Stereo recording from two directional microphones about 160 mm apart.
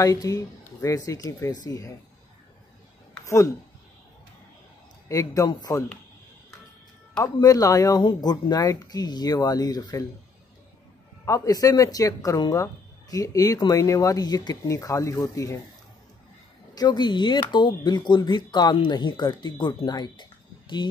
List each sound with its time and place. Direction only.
0.0 s speech: 20° left (ahead or behind)
3.3 s speech: 20° left (ahead or behind)
5.0 s speech: 20° left (ahead or behind)
7.2 s speech: 25° left (ahead or behind)
11.2 s speech: 20° left (ahead or behind)
16.7 s speech: 25° left (ahead or behind)